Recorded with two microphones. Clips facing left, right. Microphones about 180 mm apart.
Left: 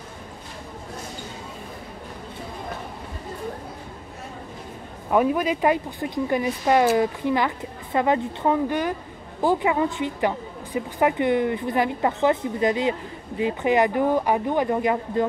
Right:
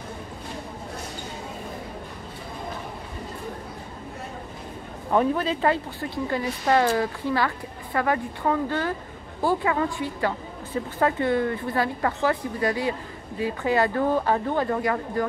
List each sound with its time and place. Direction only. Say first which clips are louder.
5.1 s a woman's voice: left 2 dB; 10° left (ahead or behind)